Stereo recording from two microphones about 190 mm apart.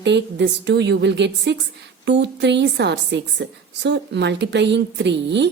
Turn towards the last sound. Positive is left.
turn(degrees=-65)  # may be behind; listen again after turning